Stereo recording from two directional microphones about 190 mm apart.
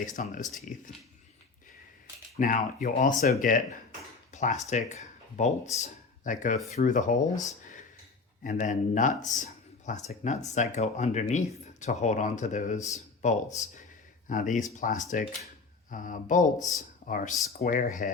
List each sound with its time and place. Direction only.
0.0 s speech: 45° left (ahead or behind)
2.4 s speech: 45° left (ahead or behind)